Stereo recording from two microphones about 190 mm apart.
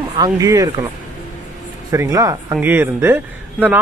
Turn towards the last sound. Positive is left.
turn(degrees=-10)  # may be behind; listen again after turning